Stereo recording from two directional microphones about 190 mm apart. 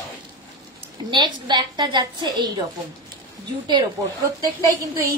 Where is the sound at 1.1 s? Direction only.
25° right (ahead or behind).